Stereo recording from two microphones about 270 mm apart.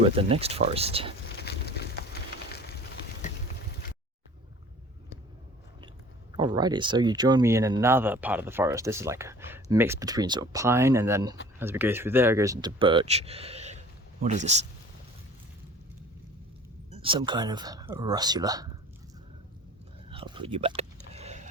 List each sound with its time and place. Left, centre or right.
0.0 s speech: right
1.4 s a sound: left
2.5 s fire: left
6.3 s speech: centre
16.9 s speech: centre
20.1 s a sound: centre